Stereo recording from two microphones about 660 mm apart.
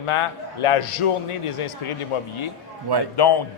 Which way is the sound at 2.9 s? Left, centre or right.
Right.